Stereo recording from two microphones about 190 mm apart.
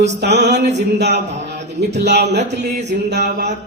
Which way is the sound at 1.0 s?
35° right (ahead or behind).